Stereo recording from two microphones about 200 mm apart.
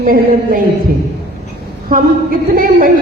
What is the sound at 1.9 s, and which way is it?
Music, 45° right (ahead or behind).